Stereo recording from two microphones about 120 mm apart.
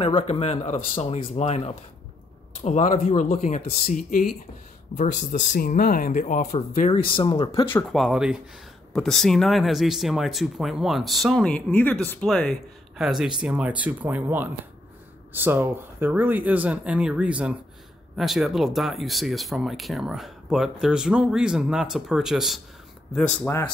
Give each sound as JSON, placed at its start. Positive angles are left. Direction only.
{"t": 0.0, "sound": "speech", "side_deg": 50}
{"t": 2.6, "sound": "speech", "side_deg": 75}
{"t": 3.9, "sound": "speech", "side_deg": 90}
{"t": 6.9, "sound": "speech", "side_deg": 45}
{"t": 7.9, "sound": "speech", "side_deg": 0}
{"t": 11.4, "sound": "speech", "side_deg": 15}
{"t": 12.9, "sound": "speech", "side_deg": -5}